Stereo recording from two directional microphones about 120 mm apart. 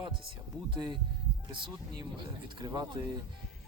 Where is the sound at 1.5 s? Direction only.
35° right (ahead or behind).